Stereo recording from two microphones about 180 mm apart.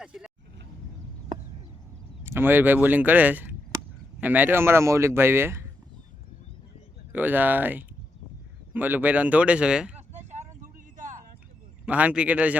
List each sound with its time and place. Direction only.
0.0 s vehicle: 5° right (ahead or behind)
2.2 s speech: 10° right (ahead or behind)
7.1 s speech: 10° right (ahead or behind)
10.2 s vehicle: 40° right (ahead or behind)
11.9 s speech: 10° right (ahead or behind)